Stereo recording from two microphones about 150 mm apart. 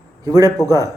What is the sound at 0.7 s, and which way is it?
Speech, 20° right (ahead or behind).